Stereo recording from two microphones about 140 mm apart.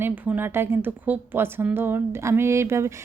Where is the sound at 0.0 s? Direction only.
15° right (ahead or behind).